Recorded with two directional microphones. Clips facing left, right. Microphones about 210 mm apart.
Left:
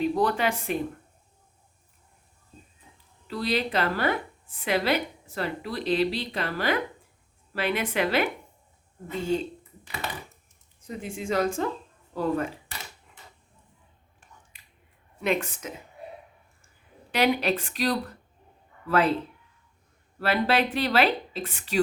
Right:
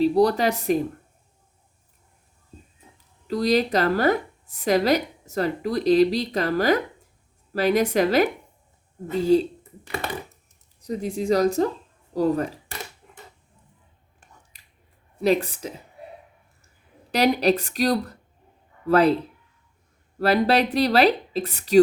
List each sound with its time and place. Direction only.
0.0 s speech: 35° right (ahead or behind)
3.2 s a woman's voice: 40° right (ahead or behind)
14.5 s a sound: 40° right (ahead or behind)
15.2 s a woman's voice: 35° right (ahead or behind)
17.1 s a woman's voice: 40° right (ahead or behind)
20.1 s a woman's voice: 40° right (ahead or behind)